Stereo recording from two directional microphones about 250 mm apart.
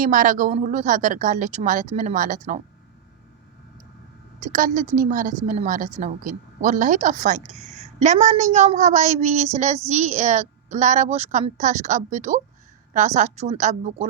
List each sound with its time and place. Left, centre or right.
0.0 s a woman's voice: right
4.4 s a woman's voice: right